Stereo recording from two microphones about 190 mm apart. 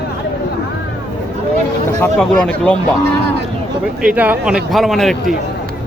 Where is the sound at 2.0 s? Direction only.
5° left (ahead or behind).